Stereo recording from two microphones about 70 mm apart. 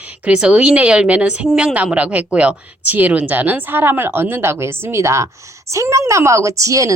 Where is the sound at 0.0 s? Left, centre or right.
Centre.